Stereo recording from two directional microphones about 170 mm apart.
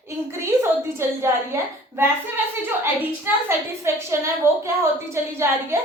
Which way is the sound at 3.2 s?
15° right (ahead or behind).